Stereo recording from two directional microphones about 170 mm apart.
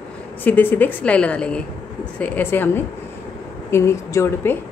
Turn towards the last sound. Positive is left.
turn(degrees=15)  # may be behind; listen again after turning